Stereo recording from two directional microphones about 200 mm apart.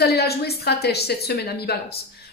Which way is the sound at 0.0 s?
50° left (ahead or behind).